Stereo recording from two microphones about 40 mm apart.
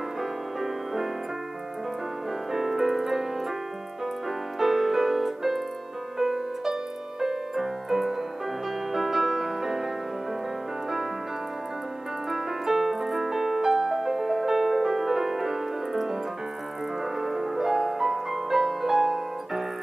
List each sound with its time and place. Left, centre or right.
0.2 s music: centre
2.5 s music: centre
4.6 s music: centre
12.3 s piano: centre
17.0 s music: centre